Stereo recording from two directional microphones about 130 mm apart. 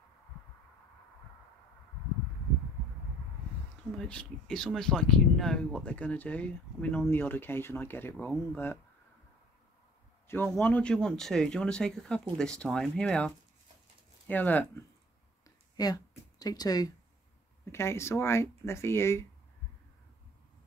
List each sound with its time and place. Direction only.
3.9 s speech: 5° left (ahead or behind)
10.2 s speech: 15° left (ahead or behind)
15.4 s a sound: 30° left (ahead or behind)
17.6 s speech: 20° left (ahead or behind)